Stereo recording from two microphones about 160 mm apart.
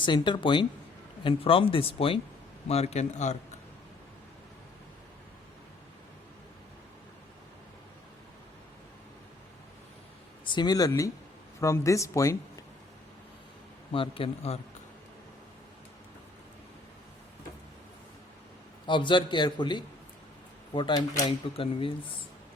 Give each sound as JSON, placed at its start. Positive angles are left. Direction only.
{"t": 0.0, "sound": "a man's voice", "side_deg": 30}
{"t": 10.4, "sound": "speech", "side_deg": 30}
{"t": 13.9, "sound": "speech", "side_deg": 35}
{"t": 18.9, "sound": "speech", "side_deg": 30}